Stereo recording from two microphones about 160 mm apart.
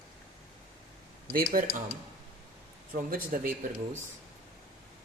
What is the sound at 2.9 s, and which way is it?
Speech, 60° right (ahead or behind).